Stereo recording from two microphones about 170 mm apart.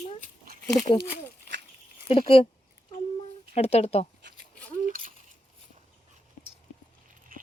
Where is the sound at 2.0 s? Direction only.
30° left (ahead or behind).